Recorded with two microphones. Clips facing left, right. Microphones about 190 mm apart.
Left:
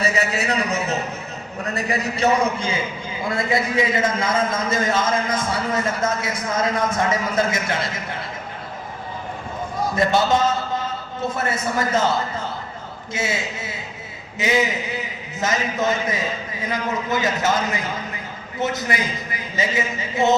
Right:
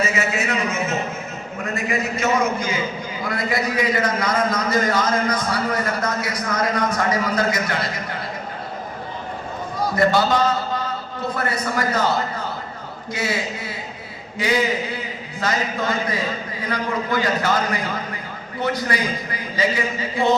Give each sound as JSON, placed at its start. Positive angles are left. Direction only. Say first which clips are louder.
{"t": 0.0, "sound": "a man's voice", "louder": "even", "side_deg": 35}
{"t": 9.9, "sound": "a man's voice", "louder": "right 1 dB", "side_deg": 25}
{"t": 13.1, "sound": "a man's voice", "louder": "right 1 dB", "side_deg": 25}